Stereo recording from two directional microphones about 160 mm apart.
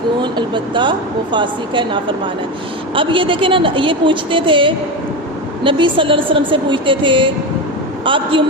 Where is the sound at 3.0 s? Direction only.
35° right (ahead or behind).